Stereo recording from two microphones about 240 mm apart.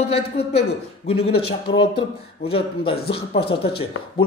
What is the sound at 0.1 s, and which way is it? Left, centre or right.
A man's voice, left.